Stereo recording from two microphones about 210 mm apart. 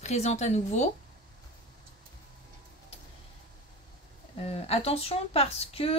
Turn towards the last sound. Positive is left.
turn(degrees=30)  # may be behind; listen again after turning